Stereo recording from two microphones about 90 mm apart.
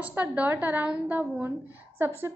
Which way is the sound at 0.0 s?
15° right (ahead or behind).